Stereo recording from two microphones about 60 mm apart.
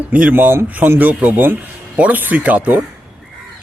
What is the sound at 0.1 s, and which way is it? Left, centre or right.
Speech, right.